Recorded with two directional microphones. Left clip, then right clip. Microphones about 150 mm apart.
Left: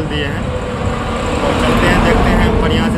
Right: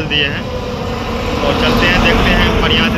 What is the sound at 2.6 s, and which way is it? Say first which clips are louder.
Speech: right 3 dB; 40° left (ahead or behind).